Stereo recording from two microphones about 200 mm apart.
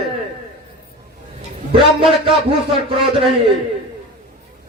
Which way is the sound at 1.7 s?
25° right (ahead or behind).